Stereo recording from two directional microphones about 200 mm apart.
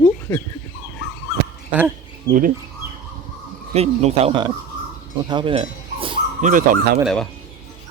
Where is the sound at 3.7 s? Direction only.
30° right (ahead or behind).